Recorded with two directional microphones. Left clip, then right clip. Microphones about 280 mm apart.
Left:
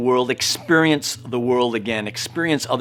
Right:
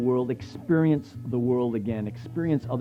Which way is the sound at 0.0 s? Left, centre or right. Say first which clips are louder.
Left 8 dB; centre.